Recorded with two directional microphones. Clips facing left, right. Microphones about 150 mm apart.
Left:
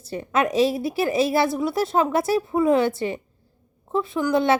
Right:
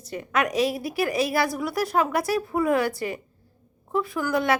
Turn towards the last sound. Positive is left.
turn(degrees=25)  # may be behind; listen again after turning